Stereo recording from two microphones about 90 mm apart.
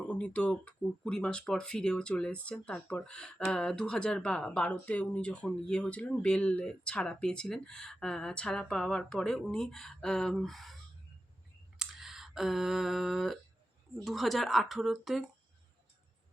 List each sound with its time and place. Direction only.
0.0 s speech: 15° left (ahead or behind)
11.8 s a sound: 5° right (ahead or behind)
14.0 s a woman's voice: centre (ahead or behind)